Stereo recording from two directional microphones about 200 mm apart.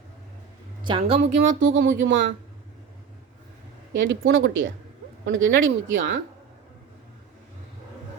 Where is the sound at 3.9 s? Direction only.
70° right (ahead or behind).